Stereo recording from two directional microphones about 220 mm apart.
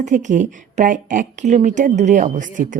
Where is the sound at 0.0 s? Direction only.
35° right (ahead or behind).